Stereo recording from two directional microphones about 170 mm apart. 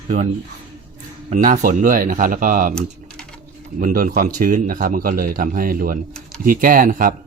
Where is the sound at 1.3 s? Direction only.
50° right (ahead or behind).